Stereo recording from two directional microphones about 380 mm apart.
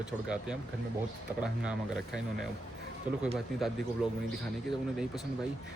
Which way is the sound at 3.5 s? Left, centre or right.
Centre.